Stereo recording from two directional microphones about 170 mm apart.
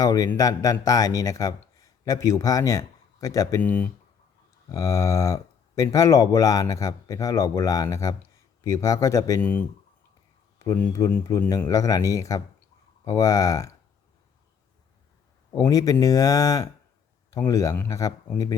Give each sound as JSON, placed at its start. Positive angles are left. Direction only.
{"t": 0.0, "sound": "a man's voice", "side_deg": 20}
{"t": 9.4, "sound": "a man's voice", "side_deg": 10}
{"t": 15.5, "sound": "a man's voice", "side_deg": 20}